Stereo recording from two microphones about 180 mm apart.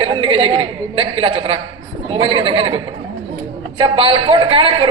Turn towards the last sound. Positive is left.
turn(degrees=-30)  # may be behind; listen again after turning